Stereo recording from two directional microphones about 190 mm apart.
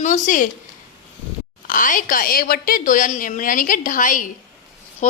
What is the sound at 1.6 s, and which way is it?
A woman's voice, 45° left (ahead or behind).